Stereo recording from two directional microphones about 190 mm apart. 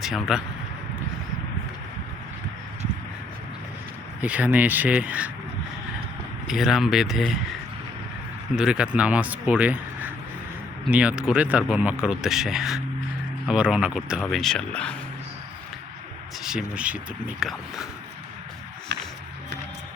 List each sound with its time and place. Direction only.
0.0 s speech: centre (ahead or behind)
4.2 s a man's voice: 5° right (ahead or behind)
6.5 s speech: centre (ahead or behind)
8.5 s a man's voice: 5° right (ahead or behind)
16.4 s speech: 5° right (ahead or behind)
18.9 s music: 65° right (ahead or behind)